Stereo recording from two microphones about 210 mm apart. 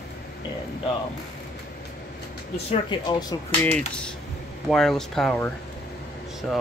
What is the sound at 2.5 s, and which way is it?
Speech, 25° left (ahead or behind).